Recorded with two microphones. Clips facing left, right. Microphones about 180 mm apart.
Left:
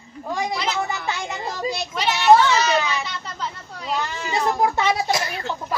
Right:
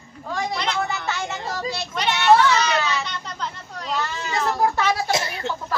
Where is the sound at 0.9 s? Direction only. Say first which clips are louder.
Even; 15° left (ahead or behind).